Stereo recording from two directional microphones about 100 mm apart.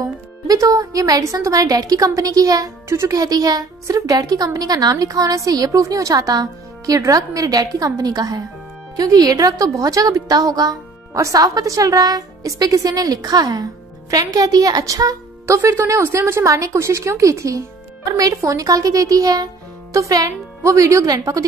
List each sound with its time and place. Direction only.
0.0 s speech: 35° right (ahead or behind)